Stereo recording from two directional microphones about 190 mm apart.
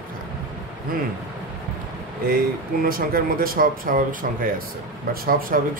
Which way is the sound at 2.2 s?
50° right (ahead or behind).